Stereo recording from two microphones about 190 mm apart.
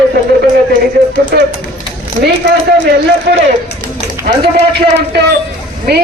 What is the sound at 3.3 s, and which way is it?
Speech, 70° right (ahead or behind).